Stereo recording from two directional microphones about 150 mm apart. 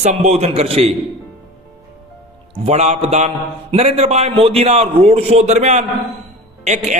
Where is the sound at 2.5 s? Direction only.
45° right (ahead or behind).